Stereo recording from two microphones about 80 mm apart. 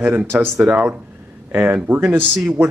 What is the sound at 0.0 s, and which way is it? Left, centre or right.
Speech, right.